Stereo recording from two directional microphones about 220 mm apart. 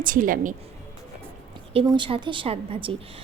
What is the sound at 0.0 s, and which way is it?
Speech, 40° right (ahead or behind).